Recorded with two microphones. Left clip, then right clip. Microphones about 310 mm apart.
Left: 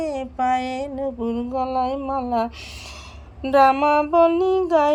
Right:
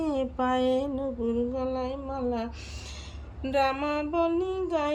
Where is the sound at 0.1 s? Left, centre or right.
Centre.